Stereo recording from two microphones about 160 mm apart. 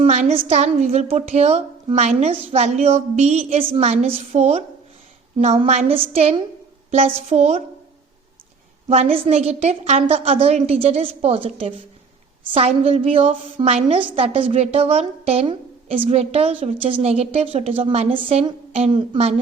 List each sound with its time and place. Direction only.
0.0 s a woman's voice: 45° right (ahead or behind)
8.9 s a woman's voice: 40° right (ahead or behind)